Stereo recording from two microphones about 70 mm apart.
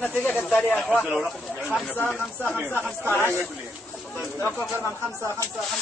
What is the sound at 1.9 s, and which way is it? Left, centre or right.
Speech, left.